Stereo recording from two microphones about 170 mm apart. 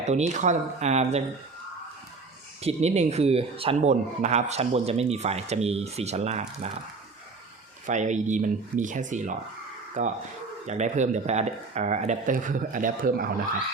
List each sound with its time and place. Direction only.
0.0 s speech: 40° right (ahead or behind)
2.6 s speech: 40° right (ahead or behind)
7.9 s speech: 45° right (ahead or behind)